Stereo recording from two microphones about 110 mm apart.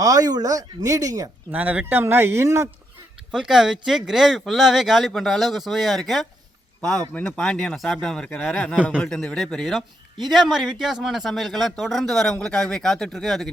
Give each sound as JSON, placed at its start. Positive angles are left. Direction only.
{"t": 0.0, "sound": "speech", "side_deg": -35}
{"t": 1.5, "sound": "speech", "side_deg": -15}
{"t": 3.3, "sound": "a man's voice", "side_deg": -5}
{"t": 7.1, "sound": "a man's voice", "side_deg": 10}